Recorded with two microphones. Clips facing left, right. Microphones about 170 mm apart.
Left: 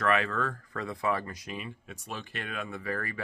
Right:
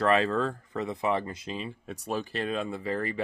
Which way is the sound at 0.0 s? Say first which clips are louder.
Right 4 dB; 30° right (ahead or behind).